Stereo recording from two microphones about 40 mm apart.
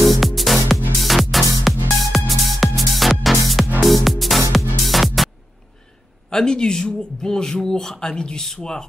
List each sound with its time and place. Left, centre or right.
0.0 s music: centre
6.3 s speech: centre